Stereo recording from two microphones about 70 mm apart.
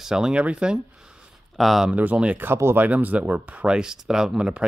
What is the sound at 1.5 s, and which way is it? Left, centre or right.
Speech, centre.